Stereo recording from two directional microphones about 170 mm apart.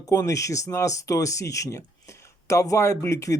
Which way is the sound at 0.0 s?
20° left (ahead or behind).